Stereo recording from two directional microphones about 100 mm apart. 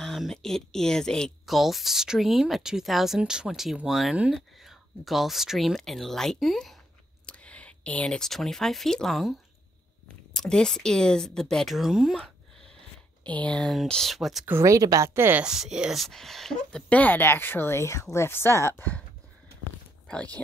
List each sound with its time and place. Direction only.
0.0 s speech: 5° left (ahead or behind)
7.2 s speech: 10° left (ahead or behind)
10.3 s speech: 5° left (ahead or behind)
13.2 s speech: 15° left (ahead or behind)
14.4 s speech: 25° right (ahead or behind)
15.1 s speech: 20° right (ahead or behind)
15.4 s speech: 5° right (ahead or behind)
16.9 s speech: 15° left (ahead or behind)